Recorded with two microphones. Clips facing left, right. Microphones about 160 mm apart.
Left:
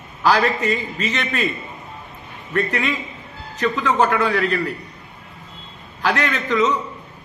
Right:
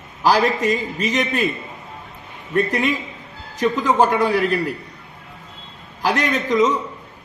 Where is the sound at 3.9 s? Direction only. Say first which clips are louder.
Right 1 dB; 15° right (ahead or behind).